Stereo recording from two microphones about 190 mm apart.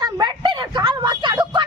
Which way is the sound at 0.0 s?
20° right (ahead or behind).